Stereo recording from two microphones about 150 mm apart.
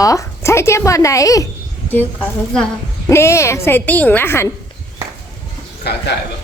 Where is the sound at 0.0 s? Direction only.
20° left (ahead or behind).